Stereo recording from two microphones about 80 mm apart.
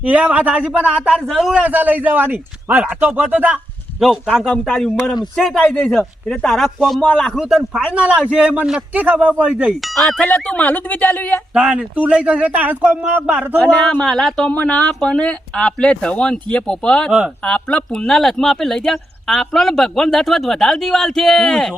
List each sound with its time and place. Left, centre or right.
0.0 s speech: centre
1.6 s a man's voice: centre
4.0 s speech: centre
9.8 s speech: centre
10.2 s speech: centre
11.5 s speech: centre
13.6 s speech: centre
14.5 s speech: left
14.8 s speech: centre
17.1 s speech: centre
17.4 s speech: centre